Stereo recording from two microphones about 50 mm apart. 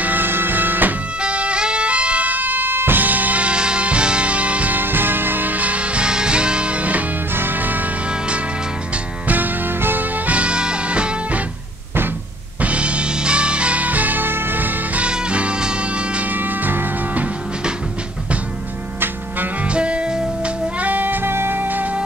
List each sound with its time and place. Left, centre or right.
0.0 s music: right
1.2 s music: right
4.7 s music: right
7.3 s music: right
9.3 s music: right
12.6 s music: right
15.0 s music: right
16.3 s music: right
19.7 s music: right
20.9 s music: right